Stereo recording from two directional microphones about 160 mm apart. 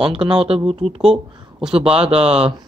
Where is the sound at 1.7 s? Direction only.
35° right (ahead or behind).